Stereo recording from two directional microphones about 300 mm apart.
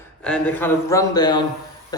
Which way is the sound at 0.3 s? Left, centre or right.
Centre.